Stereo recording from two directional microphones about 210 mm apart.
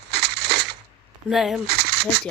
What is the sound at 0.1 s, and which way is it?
Crushing, 50° right (ahead or behind).